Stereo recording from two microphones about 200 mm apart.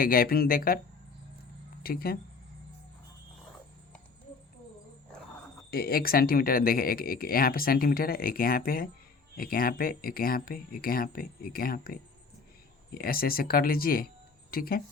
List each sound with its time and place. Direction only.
0.0 s speech: 45° left (ahead or behind)
1.8 s speech: 50° left (ahead or behind)
5.7 s speech: 50° left (ahead or behind)